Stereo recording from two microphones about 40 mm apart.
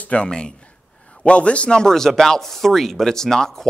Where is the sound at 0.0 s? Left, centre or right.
Left.